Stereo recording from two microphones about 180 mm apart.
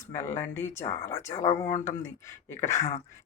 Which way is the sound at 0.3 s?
15° left (ahead or behind).